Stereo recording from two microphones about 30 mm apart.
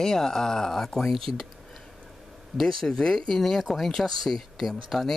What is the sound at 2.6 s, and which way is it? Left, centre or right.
Speech, centre.